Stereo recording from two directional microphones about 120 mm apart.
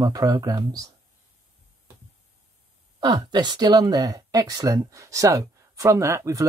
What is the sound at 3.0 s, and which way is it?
Speech, 35° right (ahead or behind).